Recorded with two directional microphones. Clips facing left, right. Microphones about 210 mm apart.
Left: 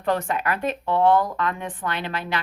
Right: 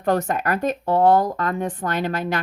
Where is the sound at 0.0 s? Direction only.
45° right (ahead or behind).